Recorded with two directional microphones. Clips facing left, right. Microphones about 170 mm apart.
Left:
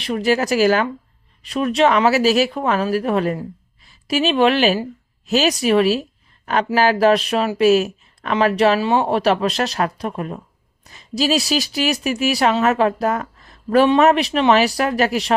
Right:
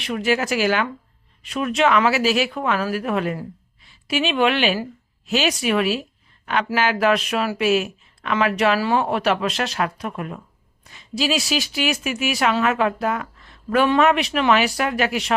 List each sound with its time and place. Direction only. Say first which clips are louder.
0.0 s a woman's voice: left 3 dB; 35° left (ahead or behind)